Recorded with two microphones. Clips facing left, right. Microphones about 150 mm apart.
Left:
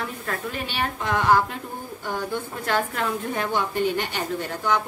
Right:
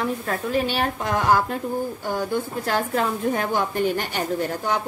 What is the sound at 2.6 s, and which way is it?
A woman's voice, 35° right (ahead or behind).